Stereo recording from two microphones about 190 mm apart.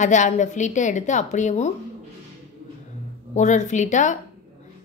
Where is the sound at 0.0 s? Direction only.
40° left (ahead or behind).